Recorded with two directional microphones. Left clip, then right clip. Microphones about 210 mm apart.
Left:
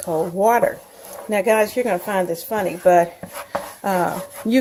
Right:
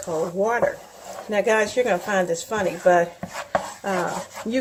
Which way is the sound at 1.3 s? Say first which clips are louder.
Left 3 dB; 35° left (ahead or behind).